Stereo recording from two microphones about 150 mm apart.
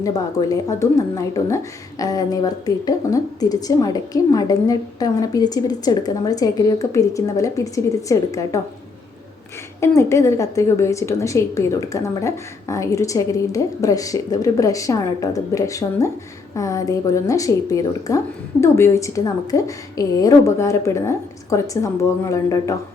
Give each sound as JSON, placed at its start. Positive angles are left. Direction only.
{"t": 0.0, "sound": "a woman's voice", "side_deg": 25}
{"t": 9.8, "sound": "a woman's voice", "side_deg": 20}